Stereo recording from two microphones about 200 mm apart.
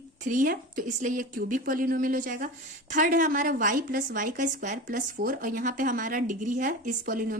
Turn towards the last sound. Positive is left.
turn(degrees=-45)  # may be behind; listen again after turning